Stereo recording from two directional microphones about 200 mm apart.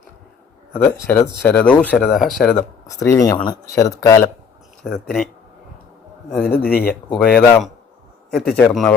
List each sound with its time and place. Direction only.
0.7 s speech: 10° left (ahead or behind)
2.6 s speech: 15° left (ahead or behind)
4.8 s speech: centre (ahead or behind)
6.3 s speech: 5° left (ahead or behind)
6.7 s speech: 50° left (ahead or behind)
7.1 s speech: 5° left (ahead or behind)